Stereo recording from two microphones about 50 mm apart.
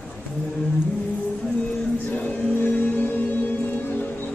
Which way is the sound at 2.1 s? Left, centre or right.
Left.